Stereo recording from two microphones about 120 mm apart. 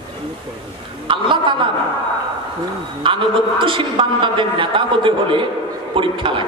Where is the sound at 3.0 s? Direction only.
45° right (ahead or behind).